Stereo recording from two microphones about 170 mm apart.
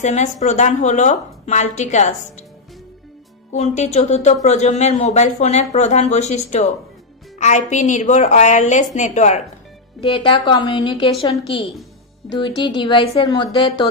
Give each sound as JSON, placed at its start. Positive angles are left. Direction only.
{"t": 0.0, "sound": "a woman's voice", "side_deg": 45}
{"t": 3.5, "sound": "a woman's voice", "side_deg": 40}
{"t": 9.9, "sound": "a woman's voice", "side_deg": 30}